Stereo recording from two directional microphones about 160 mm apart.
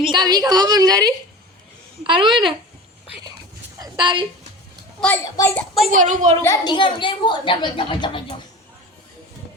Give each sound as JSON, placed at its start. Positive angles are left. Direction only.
{"t": 0.0, "sound": "a woman's voice", "side_deg": -30}
{"t": 3.8, "sound": "a sound", "side_deg": -25}
{"t": 4.9, "sound": "a child's voice", "side_deg": 10}
{"t": 5.5, "sound": "a child's voice", "side_deg": 0}
{"t": 5.9, "sound": "a woman's voice", "side_deg": -50}
{"t": 6.4, "sound": "a woman's voice", "side_deg": 20}
{"t": 6.7, "sound": "a child's voice", "side_deg": 30}